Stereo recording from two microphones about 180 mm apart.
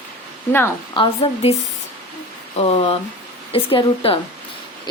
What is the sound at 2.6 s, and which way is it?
A woman's voice, 30° left (ahead or behind).